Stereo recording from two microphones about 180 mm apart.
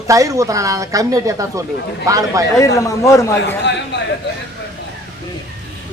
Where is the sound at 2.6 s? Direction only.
15° left (ahead or behind).